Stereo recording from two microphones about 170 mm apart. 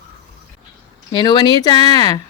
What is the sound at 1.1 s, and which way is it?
Speech, 25° left (ahead or behind).